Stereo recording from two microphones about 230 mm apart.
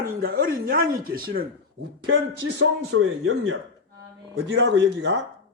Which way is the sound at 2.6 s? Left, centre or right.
Right.